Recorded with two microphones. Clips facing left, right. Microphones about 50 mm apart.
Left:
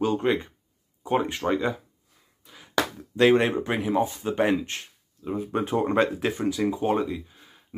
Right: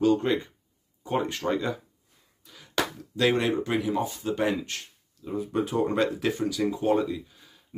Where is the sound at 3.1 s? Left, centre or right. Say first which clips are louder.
Left 4 dB; left.